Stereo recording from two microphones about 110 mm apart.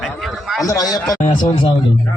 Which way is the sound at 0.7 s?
35° left (ahead or behind).